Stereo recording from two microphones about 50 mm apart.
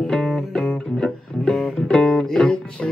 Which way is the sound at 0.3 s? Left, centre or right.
Centre.